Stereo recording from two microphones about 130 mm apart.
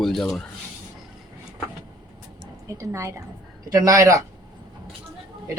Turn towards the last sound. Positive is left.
turn(degrees=-25)  # may be behind; listen again after turning